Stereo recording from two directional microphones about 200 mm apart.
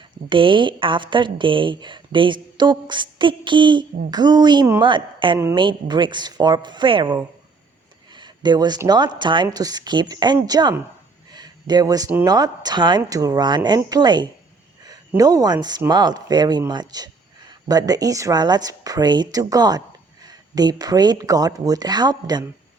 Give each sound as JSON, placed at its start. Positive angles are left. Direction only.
{"t": 0.3, "sound": "a woman's voice", "side_deg": -25}